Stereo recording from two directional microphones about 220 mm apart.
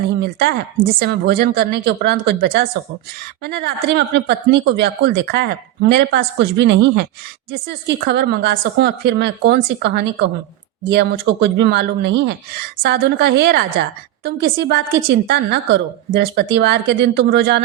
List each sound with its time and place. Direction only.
0.2 s speech: 45° right (ahead or behind)